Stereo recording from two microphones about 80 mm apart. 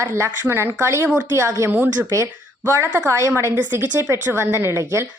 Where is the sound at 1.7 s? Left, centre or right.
Right.